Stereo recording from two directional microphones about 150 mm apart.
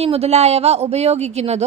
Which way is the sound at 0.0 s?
40° right (ahead or behind).